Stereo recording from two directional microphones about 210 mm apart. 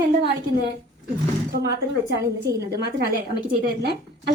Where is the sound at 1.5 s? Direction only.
50° right (ahead or behind).